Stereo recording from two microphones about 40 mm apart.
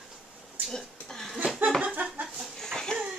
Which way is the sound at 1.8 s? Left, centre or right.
Right.